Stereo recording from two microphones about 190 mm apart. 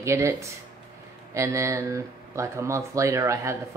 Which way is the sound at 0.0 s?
15° right (ahead or behind).